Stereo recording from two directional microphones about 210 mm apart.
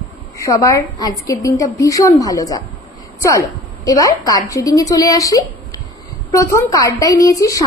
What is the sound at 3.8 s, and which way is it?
A woman's voice, 15° left (ahead or behind).